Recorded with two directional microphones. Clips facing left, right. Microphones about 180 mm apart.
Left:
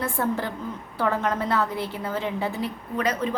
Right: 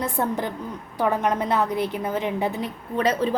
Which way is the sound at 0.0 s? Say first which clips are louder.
Right 1 dB; 20° right (ahead or behind).